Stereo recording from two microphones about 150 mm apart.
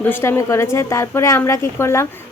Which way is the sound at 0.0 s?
15° left (ahead or behind).